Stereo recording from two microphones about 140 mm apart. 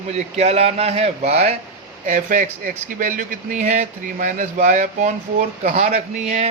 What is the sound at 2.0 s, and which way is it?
A man's voice, 65° right (ahead or behind).